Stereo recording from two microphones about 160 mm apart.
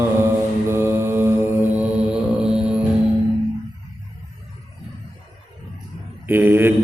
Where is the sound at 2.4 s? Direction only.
5° right (ahead or behind).